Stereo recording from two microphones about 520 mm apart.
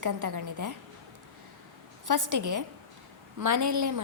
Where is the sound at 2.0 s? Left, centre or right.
Right.